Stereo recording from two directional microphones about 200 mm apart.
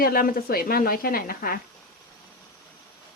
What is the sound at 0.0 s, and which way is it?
A woman's voice, 45° left (ahead or behind).